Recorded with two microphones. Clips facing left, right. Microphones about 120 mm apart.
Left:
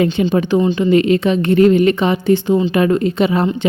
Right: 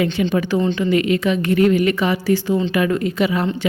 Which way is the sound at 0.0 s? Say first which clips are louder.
Left 4 dB; 30° left (ahead or behind).